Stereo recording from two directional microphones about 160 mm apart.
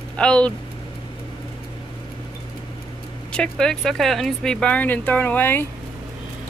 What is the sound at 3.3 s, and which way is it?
Speech, 5° left (ahead or behind).